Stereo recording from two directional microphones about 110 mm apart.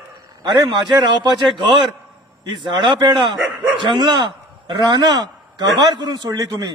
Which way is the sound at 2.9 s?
45° right (ahead or behind).